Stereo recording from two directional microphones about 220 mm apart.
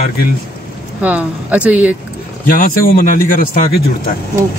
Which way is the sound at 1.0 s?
5° right (ahead or behind).